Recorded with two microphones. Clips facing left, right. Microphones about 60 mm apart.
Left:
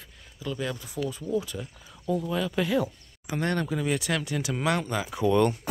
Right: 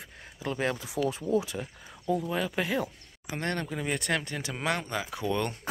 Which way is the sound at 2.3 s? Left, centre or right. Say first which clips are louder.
Left 3 dB; centre.